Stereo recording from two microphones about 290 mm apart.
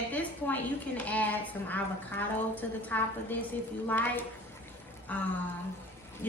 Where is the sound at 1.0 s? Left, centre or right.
Centre.